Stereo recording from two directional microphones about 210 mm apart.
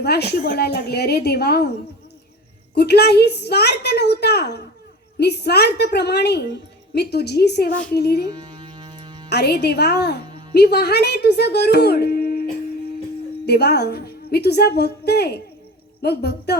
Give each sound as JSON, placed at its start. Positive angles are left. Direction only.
{"t": 0.0, "sound": "a woman's voice", "side_deg": 50}
{"t": 2.7, "sound": "a woman's voice", "side_deg": 50}
{"t": 8.3, "sound": "music", "side_deg": -20}
{"t": 9.3, "sound": "a woman's voice", "side_deg": 50}